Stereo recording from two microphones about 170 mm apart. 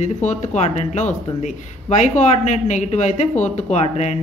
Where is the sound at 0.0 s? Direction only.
45° left (ahead or behind).